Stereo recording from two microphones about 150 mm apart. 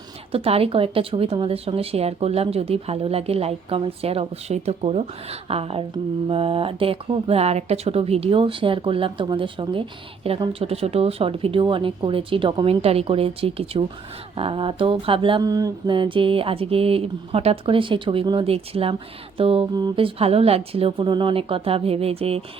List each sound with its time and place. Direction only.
0.3 s speech: 40° right (ahead or behind)
15.4 s speech: 25° right (ahead or behind); by 22.4 s 40° right (ahead or behind)